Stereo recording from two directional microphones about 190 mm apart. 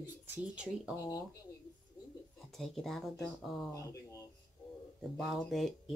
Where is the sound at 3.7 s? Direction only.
15° left (ahead or behind).